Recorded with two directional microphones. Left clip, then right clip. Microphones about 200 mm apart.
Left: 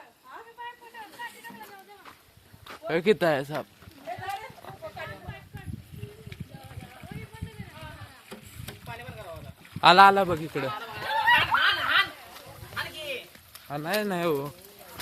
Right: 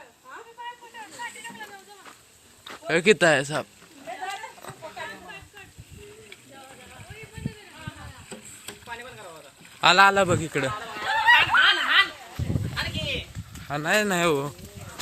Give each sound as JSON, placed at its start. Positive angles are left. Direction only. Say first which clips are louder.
{"t": 2.8, "sound": "speech", "louder": "right 4 dB", "side_deg": 5}
{"t": 9.8, "sound": "speech", "louder": "left 1 dB", "side_deg": 10}
{"t": 10.3, "sound": "speech", "louder": "right 4 dB", "side_deg": 0}
{"t": 10.7, "sound": "a sound", "louder": "right 3 dB", "side_deg": 45}
{"t": 13.7, "sound": "speech", "louder": "right 6 dB", "side_deg": 0}